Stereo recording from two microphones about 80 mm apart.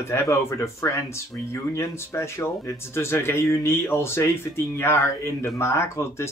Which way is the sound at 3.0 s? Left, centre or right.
Left.